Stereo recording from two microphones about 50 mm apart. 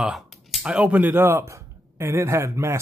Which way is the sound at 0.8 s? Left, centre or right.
Right.